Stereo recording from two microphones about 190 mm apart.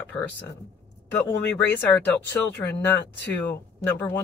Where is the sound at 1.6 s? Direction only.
10° left (ahead or behind).